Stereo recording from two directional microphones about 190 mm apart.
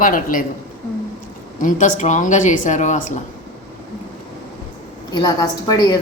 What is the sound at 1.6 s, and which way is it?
Speech, 40° left (ahead or behind).